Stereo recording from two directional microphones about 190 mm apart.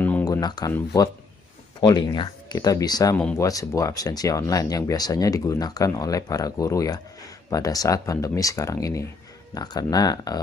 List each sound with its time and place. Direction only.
0.0 s a sound: 15° left (ahead or behind)
0.7 s speech: 20° left (ahead or behind)
3.2 s speech: 5° left (ahead or behind)
3.4 s speech: 20° left (ahead or behind)